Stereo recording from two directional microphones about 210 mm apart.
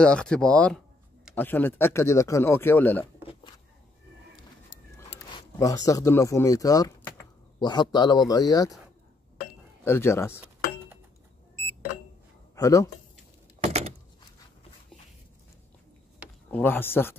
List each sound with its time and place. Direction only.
0.0 s speech: 5° left (ahead or behind)
5.3 s speech: 15° left (ahead or behind)
9.8 s speech: 10° left (ahead or behind)
12.5 s speech: 15° left (ahead or behind)
13.6 s door: 30° right (ahead or behind)
16.5 s speech: 10° left (ahead or behind)